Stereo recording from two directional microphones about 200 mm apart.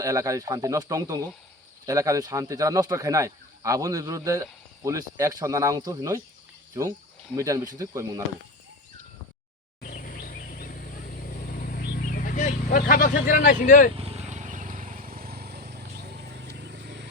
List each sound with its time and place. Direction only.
0.0 s speech: 15° right (ahead or behind)
7.3 s speech: 15° right (ahead or behind)
9.8 s vehicle: 40° left (ahead or behind)
13.2 s speech: 45° left (ahead or behind)
13.9 s vehicle: 30° right (ahead or behind); by 15.8 s 55° right (ahead or behind)
16.0 s a sound: 55° right (ahead or behind)